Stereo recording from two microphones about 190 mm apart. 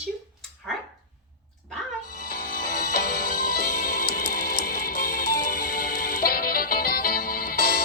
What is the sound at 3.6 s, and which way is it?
Music, 55° left (ahead or behind).